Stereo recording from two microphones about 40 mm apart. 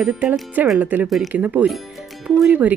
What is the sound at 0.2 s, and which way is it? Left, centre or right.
Speech, right.